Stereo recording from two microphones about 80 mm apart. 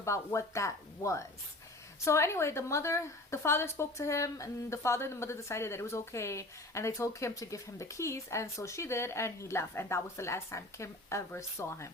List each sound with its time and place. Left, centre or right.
0.0 s a woman's voice: left